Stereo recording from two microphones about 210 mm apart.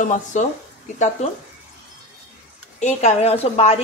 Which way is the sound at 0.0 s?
35° left (ahead or behind).